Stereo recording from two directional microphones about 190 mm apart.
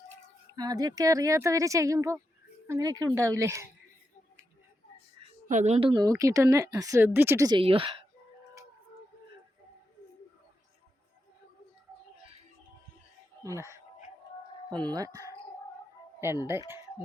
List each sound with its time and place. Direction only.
0.5 s speech: 20° right (ahead or behind)
5.5 s a woman's voice: 40° right (ahead or behind)
5.9 s speech: 20° right (ahead or behind)
13.4 s speech: 15° right (ahead or behind)
14.8 s speech: 20° right (ahead or behind)